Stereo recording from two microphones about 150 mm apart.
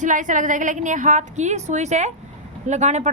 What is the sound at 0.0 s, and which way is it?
A woman's voice, 55° right (ahead or behind).